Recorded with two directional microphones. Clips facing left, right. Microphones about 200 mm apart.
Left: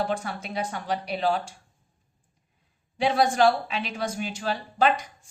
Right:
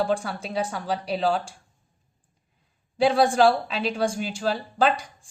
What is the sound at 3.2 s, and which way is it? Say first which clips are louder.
A woman's voice: right 1 dB; 35° right (ahead or behind).